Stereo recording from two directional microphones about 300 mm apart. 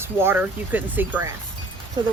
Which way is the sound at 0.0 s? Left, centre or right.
Centre.